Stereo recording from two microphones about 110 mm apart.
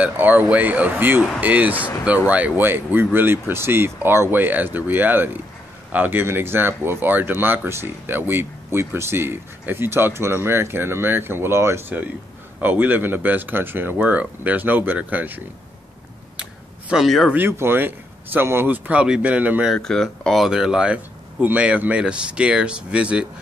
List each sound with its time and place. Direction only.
0.0 s speech: 15° right (ahead or behind)
16.9 s speech: centre (ahead or behind)
17.3 s speech: 20° right (ahead or behind)
19.7 s speech: 5° left (ahead or behind)